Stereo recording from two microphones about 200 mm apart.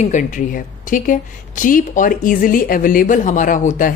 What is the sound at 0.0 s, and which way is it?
A woman's voice, 40° left (ahead or behind).